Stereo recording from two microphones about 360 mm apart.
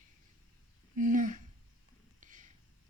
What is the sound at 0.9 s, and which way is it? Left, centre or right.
Speech, right.